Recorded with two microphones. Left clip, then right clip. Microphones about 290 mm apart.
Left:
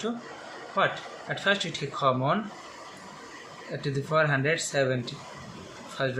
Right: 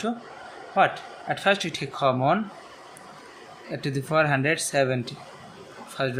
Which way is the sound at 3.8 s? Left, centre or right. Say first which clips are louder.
Right 2 dB; right.